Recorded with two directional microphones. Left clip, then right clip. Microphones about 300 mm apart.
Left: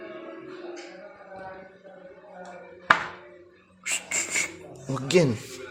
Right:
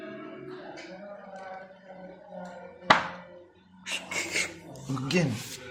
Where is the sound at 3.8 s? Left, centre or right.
Left.